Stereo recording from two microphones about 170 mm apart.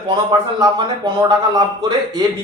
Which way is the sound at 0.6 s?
25° right (ahead or behind).